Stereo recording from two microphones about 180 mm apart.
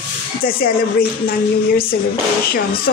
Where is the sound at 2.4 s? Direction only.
55° left (ahead or behind).